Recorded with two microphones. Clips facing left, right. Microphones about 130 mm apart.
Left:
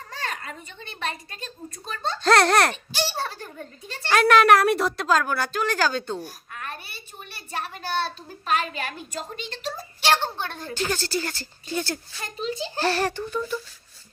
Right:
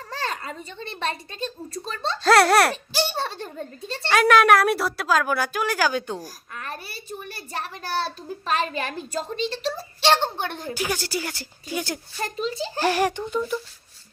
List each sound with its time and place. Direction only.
0.1 s a child's voice: 30° right (ahead or behind)
2.2 s a woman's voice: 5° right (ahead or behind)
3.0 s a child's voice: 25° right (ahead or behind)
4.1 s a woman's voice: centre (ahead or behind)
6.2 s a child's voice: 35° right (ahead or behind)
10.0 s a woman's voice: 20° right (ahead or behind)
12.2 s a child's voice: 35° right (ahead or behind)
12.8 s a woman's voice: 15° right (ahead or behind)